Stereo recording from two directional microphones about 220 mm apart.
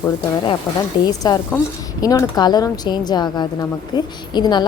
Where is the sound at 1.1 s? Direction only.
15° left (ahead or behind).